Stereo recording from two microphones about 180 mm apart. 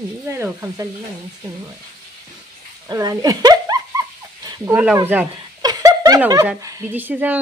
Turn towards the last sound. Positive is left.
turn(degrees=-10)  # may be behind; listen again after turning